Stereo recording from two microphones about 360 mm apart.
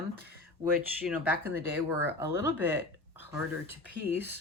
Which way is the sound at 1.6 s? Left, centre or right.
Centre.